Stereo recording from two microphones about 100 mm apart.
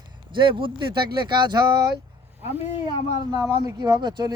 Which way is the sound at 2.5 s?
90° left.